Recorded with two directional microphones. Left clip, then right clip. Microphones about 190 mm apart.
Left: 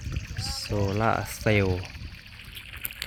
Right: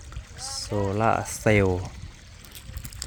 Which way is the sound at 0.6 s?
5° right (ahead or behind).